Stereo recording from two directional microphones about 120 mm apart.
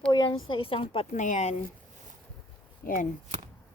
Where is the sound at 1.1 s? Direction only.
85° left.